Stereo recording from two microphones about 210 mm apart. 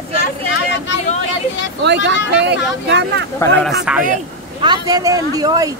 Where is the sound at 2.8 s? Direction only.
55° right (ahead or behind).